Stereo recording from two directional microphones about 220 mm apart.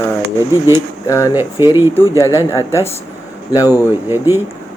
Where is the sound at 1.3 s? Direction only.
10° right (ahead or behind).